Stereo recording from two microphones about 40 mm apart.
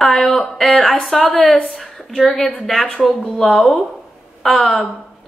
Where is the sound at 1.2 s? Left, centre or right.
Left.